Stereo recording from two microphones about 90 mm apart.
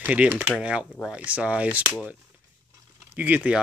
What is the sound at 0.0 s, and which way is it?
Speech, 20° right (ahead or behind).